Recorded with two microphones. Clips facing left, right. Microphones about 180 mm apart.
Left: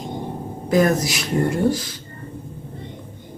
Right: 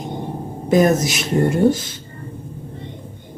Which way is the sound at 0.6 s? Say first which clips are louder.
Right 3 dB; 20° right (ahead or behind).